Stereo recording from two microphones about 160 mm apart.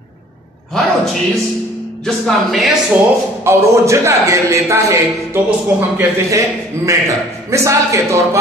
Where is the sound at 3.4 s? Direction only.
15° right (ahead or behind).